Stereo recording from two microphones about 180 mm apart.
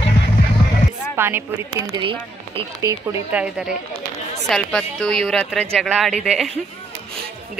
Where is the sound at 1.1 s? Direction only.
15° right (ahead or behind).